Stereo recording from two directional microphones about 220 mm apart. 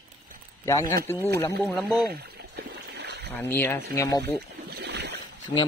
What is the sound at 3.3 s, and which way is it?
Speech, 10° left (ahead or behind).